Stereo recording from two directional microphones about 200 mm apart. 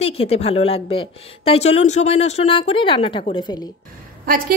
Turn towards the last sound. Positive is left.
turn(degrees=-45)  # may be behind; listen again after turning